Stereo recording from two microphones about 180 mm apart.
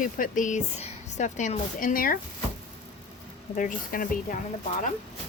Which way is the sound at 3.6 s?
50° left (ahead or behind).